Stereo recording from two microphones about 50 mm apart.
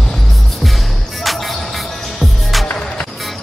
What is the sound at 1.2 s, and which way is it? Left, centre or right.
Music, centre.